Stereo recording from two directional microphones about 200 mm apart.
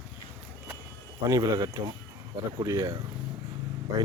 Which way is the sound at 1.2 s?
15° right (ahead or behind).